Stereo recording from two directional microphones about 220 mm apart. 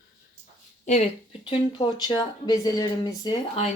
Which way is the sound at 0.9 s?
30° left (ahead or behind).